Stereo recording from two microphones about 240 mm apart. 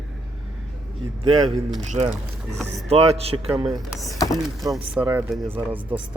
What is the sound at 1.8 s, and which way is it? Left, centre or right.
Speech, right.